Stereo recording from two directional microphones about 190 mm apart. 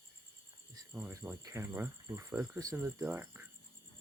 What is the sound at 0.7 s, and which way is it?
Speech, 15° right (ahead or behind).